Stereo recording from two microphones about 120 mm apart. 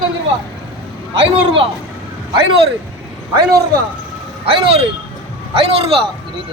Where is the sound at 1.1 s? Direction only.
45° right (ahead or behind).